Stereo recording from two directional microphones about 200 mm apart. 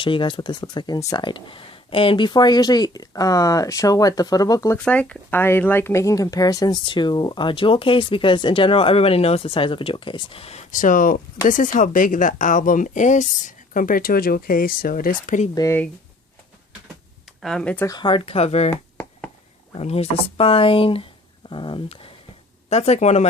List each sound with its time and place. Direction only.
0.0 s a woman's voice: 25° left (ahead or behind); by 15.4 s 45° left (ahead or behind)
15.5 s speech: 15° left (ahead or behind)
17.4 s speech: 5° left (ahead or behind)
17.9 s speech: 25° left (ahead or behind)
18.7 s a sound: 10° left (ahead or behind)
19.7 s speech: 30° left (ahead or behind)